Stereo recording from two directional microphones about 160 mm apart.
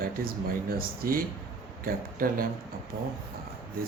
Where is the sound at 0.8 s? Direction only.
65° right (ahead or behind).